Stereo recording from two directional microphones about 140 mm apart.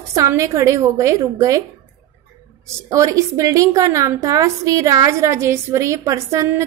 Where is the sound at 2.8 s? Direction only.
20° right (ahead or behind).